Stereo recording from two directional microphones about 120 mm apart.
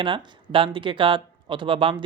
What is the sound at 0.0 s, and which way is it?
Speech, 45° right (ahead or behind).